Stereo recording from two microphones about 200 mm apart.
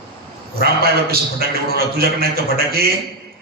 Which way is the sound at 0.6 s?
50° right (ahead or behind).